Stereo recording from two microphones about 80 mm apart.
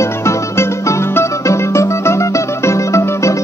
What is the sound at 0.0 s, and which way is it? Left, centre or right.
Music, left.